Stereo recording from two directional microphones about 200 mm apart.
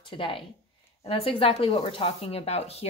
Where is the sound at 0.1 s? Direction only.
25° left (ahead or behind).